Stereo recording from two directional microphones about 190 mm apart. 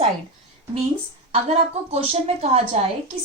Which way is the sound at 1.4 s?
35° right (ahead or behind).